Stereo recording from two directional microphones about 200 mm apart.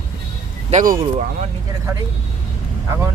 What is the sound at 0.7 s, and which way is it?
Speech, 40° right (ahead or behind).